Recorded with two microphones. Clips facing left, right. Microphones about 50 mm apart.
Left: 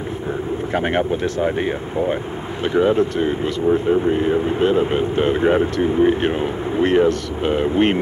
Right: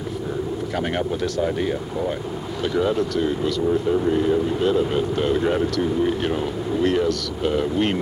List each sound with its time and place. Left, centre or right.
0.7 s speech: left